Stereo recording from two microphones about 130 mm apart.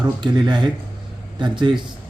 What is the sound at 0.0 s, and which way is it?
Speech, 35° right (ahead or behind).